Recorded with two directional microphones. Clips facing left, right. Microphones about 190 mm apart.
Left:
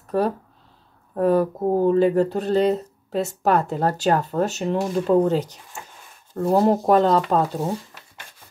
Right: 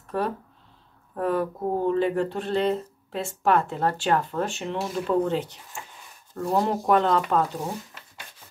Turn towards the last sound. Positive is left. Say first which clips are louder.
# left 3 dB
turn(degrees=35)  # may be behind; listen again after turning